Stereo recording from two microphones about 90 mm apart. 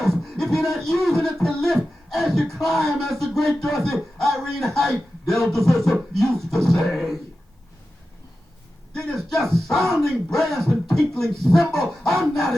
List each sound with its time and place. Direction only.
0.0 s beatboxing: 5° left (ahead or behind)
1.2 s speech: 5° left (ahead or behind)
8.9 s speech: 10° left (ahead or behind)